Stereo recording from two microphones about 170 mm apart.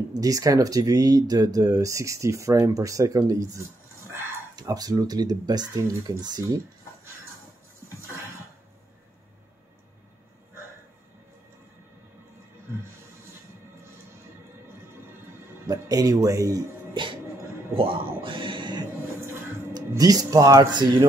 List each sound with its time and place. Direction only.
0.1 s speech: 20° right (ahead or behind)
15.6 s music: 20° right (ahead or behind)
17.7 s a sound: 30° right (ahead or behind)
19.2 s music: 20° right (ahead or behind)